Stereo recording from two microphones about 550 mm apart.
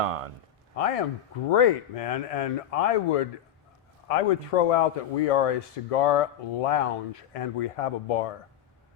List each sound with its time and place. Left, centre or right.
0.0 s speech: right
0.8 s speech: left
1.5 s speech: left